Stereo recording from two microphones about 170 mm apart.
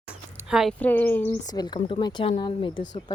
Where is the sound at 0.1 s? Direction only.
5° right (ahead or behind).